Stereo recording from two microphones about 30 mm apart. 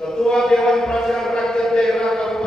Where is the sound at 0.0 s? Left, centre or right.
Centre.